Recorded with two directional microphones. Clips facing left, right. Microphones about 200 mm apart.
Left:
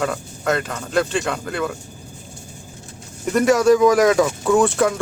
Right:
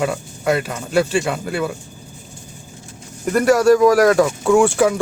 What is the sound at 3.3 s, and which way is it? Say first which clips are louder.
Speech: right 1 dB; centre (ahead or behind).